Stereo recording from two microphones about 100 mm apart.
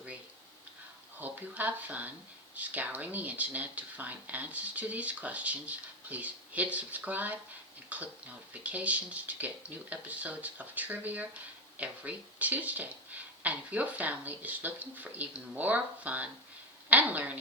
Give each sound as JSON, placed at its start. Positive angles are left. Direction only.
{"t": 1.2, "sound": "speech", "side_deg": -15}